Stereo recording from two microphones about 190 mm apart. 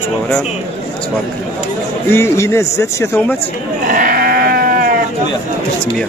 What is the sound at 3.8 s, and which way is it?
Sheep, 50° right (ahead or behind).